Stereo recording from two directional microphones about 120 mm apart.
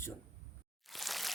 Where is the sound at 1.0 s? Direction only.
Centre (ahead or behind).